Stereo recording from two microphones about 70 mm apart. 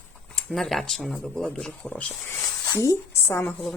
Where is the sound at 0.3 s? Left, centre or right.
Centre.